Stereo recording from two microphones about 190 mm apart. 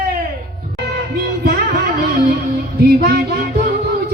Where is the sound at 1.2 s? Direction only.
55° right (ahead or behind).